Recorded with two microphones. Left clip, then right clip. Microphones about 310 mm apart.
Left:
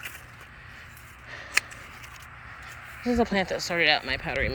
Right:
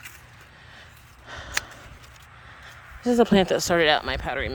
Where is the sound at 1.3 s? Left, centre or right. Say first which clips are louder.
Left 3 dB; centre.